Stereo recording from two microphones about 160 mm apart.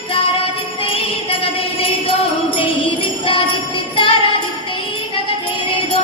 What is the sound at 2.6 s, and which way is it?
Music, 35° left (ahead or behind).